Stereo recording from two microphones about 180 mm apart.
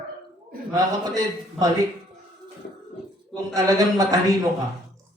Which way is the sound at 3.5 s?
20° right (ahead or behind).